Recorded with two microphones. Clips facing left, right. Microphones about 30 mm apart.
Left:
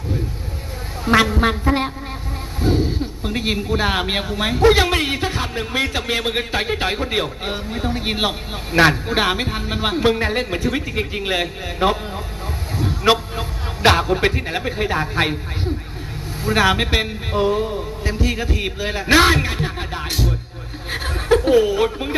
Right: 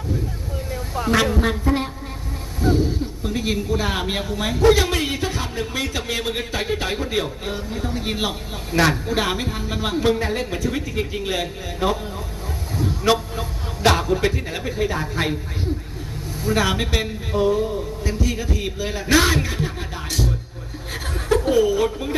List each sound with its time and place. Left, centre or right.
1.0 s a man's voice: left
2.6 s a sound: left
4.7 s a man's voice: left
12.7 s vehicle: left
13.8 s a man's voice: left
16.4 s a man's voice: left
20.9 s chuckle: left
21.8 s a man's voice: left